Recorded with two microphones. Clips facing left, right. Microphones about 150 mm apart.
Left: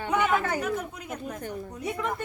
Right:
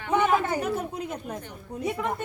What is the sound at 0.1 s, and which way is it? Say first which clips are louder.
A woman's voice: right 3 dB; 25° right (ahead or behind).